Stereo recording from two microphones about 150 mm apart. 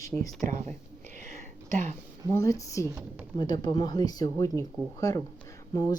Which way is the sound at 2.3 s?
20° left (ahead or behind).